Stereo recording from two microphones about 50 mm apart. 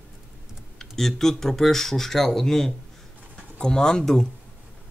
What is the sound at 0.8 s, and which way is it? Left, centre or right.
Speech, centre.